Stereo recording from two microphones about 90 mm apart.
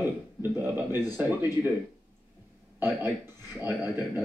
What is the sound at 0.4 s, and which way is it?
Speech, 25° right (ahead or behind).